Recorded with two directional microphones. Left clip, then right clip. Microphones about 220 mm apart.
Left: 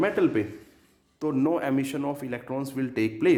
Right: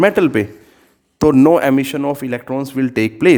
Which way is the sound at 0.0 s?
45° right (ahead or behind).